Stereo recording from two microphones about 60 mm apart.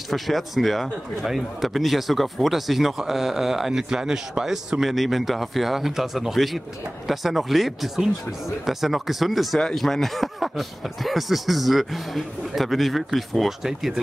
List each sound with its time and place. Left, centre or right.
0.1 s speech: centre